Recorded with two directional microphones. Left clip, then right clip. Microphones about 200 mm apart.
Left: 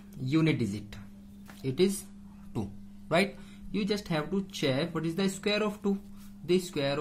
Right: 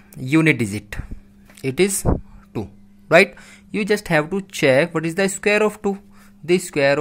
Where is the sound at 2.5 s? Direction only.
30° right (ahead or behind).